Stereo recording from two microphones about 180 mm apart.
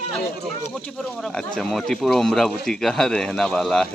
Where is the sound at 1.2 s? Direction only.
5° left (ahead or behind).